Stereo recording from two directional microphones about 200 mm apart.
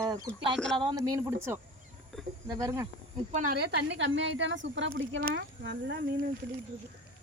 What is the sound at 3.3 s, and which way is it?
A woman's voice, 40° right (ahead or behind).